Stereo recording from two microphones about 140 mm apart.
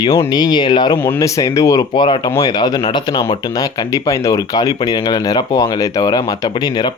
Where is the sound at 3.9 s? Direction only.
25° left (ahead or behind).